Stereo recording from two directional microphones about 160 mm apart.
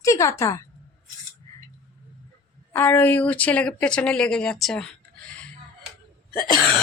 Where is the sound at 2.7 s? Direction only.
15° left (ahead or behind).